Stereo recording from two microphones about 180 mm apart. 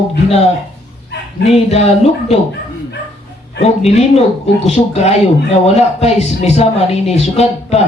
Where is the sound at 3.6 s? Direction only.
35° left (ahead or behind).